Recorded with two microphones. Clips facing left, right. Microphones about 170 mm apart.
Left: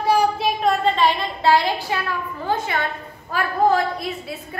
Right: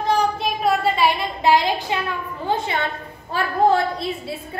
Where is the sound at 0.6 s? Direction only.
5° right (ahead or behind).